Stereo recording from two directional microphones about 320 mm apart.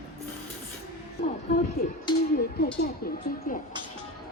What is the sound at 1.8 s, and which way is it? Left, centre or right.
Speech, left.